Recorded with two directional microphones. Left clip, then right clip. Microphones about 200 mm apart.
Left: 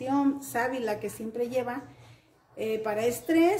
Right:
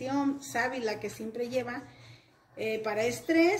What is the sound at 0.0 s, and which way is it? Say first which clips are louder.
A woman's voice: left 4 dB; 40° left (ahead or behind).